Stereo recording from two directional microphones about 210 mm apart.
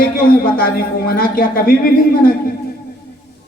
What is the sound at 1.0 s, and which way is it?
Music, 45° left (ahead or behind).